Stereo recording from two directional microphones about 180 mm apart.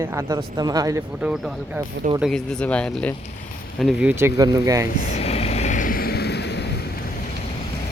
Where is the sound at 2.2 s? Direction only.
5° left (ahead or behind).